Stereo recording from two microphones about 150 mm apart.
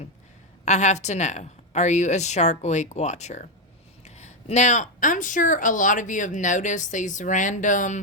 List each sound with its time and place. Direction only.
0.6 s a woman's voice: 50° left (ahead or behind)